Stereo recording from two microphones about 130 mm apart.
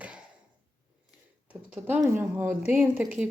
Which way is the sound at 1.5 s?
15° right (ahead or behind).